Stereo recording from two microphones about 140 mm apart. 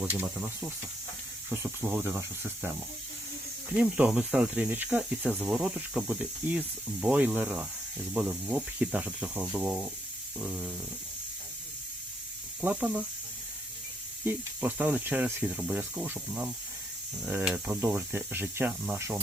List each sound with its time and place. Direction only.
0.1 s speech: 15° right (ahead or behind)
3.7 s speech: 5° right (ahead or behind)
12.8 s speech: 10° right (ahead or behind)
14.3 s speech: 10° right (ahead or behind)